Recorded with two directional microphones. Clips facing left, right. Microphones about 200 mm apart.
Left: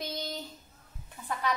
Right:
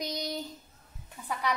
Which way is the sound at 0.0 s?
15° right (ahead or behind).